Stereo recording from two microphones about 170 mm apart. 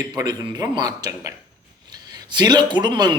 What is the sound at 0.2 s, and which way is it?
Speech, 20° right (ahead or behind).